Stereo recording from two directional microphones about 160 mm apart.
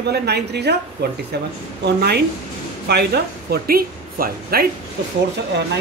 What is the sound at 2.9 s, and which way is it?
Speech, 90° right.